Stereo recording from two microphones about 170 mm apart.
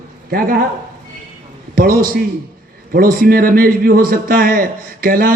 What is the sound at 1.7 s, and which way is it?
A man's voice, 55° right (ahead or behind).